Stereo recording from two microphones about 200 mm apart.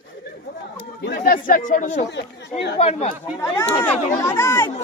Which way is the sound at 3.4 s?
15° left (ahead or behind).